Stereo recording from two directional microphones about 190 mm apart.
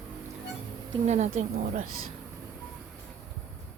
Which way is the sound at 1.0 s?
35° right (ahead or behind).